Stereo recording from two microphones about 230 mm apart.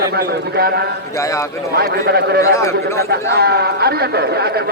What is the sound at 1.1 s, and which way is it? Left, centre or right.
Speech, centre.